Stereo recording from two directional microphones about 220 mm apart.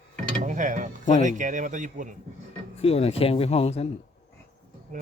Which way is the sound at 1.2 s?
35° right (ahead or behind).